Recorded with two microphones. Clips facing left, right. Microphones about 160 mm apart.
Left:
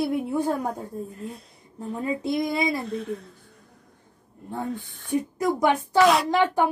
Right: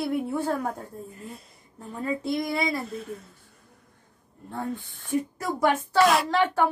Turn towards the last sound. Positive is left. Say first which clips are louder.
# left 2 dB
turn(degrees=15)  # may be behind; listen again after turning